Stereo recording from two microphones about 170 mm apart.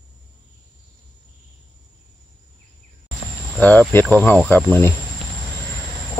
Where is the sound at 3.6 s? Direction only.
10° left (ahead or behind).